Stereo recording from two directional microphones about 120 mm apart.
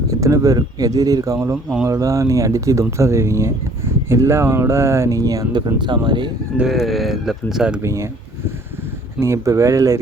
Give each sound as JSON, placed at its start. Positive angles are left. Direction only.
{"t": 0.1, "sound": "speech", "side_deg": -25}
{"t": 6.6, "sound": "speech", "side_deg": 0}
{"t": 7.8, "sound": "speech", "side_deg": -25}
{"t": 9.2, "sound": "speech", "side_deg": -25}